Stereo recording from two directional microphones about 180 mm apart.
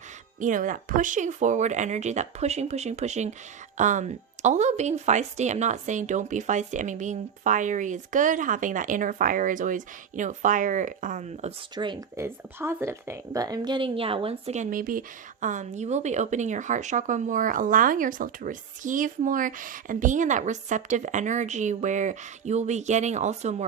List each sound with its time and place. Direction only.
0.3 s speech: 45° right (ahead or behind)
11.7 s speech: 25° right (ahead or behind)